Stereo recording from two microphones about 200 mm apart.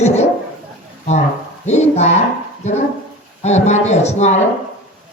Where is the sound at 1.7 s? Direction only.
35° left (ahead or behind).